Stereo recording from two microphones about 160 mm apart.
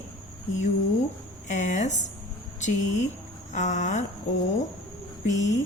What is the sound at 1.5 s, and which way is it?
A woman's voice, 50° left (ahead or behind).